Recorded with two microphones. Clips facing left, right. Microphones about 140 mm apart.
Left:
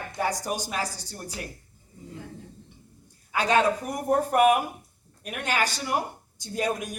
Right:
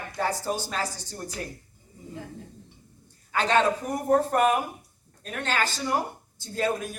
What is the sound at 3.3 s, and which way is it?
Speech, 10° left (ahead or behind).